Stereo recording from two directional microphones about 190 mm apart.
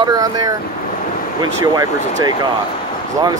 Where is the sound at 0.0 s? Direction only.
20° right (ahead or behind).